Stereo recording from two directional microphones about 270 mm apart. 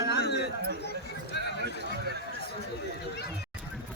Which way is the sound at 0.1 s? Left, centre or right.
Left.